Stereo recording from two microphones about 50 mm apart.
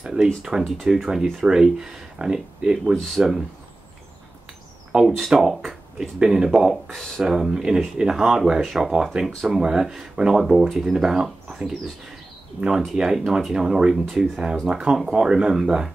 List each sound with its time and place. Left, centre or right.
0.0 s a sound: centre
0.4 s speech: centre
3.0 s speech: centre
4.9 s speech: centre
5.5 s speech: centre
6.7 s speech: centre
7.2 s speech: centre
8.5 s speech: centre
14.0 s speech: centre
14.7 s speech: centre